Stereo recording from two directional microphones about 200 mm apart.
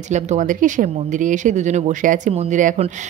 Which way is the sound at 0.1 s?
35° right (ahead or behind).